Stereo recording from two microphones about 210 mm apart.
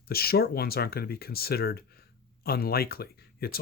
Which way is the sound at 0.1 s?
45° left (ahead or behind).